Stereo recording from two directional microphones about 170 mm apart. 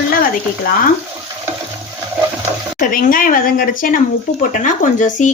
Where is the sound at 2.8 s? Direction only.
55° left (ahead or behind).